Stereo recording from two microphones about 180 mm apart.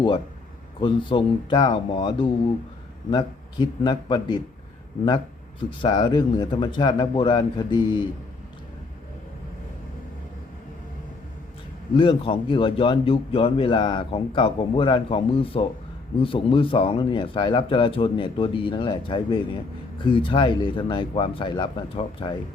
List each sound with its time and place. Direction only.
0.8 s a man's voice: 25° left (ahead or behind)
11.9 s a man's voice: 30° left (ahead or behind)